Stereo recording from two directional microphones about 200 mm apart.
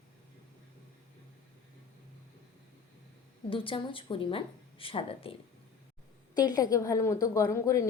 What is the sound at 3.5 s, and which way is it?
Speech, 25° left (ahead or behind).